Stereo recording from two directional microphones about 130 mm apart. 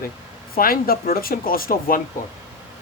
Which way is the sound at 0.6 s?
90° left.